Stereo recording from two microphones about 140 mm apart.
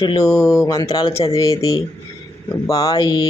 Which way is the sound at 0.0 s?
30° left (ahead or behind).